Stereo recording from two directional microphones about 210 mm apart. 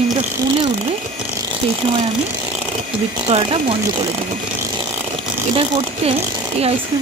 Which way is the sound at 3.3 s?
25° right (ahead or behind).